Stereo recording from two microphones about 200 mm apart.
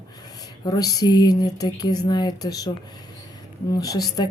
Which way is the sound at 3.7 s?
20° left (ahead or behind).